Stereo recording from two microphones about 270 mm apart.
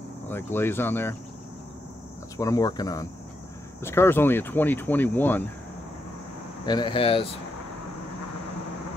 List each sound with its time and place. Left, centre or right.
0.3 s speech: centre
2.3 s speech: centre
6.6 s speech: centre